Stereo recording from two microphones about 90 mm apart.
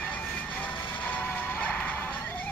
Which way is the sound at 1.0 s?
20° left (ahead or behind).